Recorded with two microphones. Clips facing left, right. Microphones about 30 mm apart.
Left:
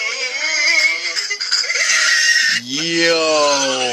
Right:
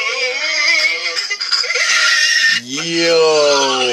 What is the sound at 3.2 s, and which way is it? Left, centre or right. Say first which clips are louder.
Speech: right 3 dB; centre.